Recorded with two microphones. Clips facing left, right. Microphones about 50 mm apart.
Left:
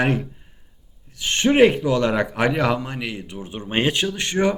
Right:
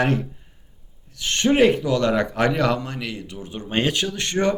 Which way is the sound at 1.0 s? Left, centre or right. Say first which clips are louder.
Left 1 dB; centre.